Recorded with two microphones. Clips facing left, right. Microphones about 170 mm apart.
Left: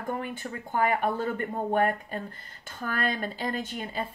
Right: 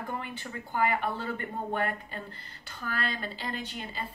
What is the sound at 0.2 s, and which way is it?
Speech, 50° left (ahead or behind).